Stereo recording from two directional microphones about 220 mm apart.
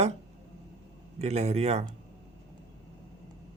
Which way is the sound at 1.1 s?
30° right (ahead or behind).